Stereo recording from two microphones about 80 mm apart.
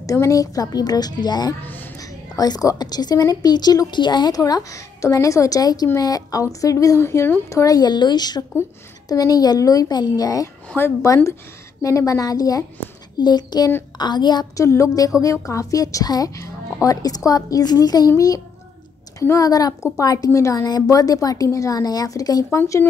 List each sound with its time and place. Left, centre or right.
0.0 s a woman's voice: left
1.6 s a sound: left
2.0 s a woman's voice: left
4.4 s a woman's voice: left
13.2 s a woman's voice: left
14.6 s a woman's voice: left